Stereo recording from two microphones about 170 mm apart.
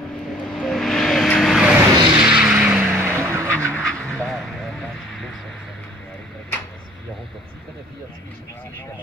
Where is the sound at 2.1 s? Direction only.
5° right (ahead or behind).